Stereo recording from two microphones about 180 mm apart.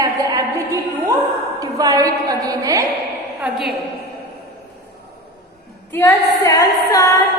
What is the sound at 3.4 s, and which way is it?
Speech, centre (ahead or behind).